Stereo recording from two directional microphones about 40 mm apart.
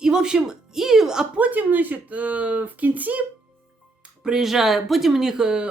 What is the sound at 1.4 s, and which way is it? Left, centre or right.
Speech, right.